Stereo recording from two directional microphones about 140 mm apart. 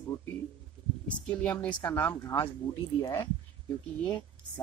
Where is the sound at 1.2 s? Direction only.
10° left (ahead or behind).